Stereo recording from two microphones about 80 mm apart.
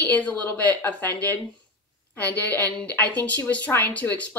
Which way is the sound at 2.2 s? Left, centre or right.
Left.